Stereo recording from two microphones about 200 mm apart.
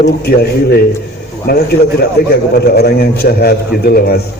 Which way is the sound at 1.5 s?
50° left (ahead or behind).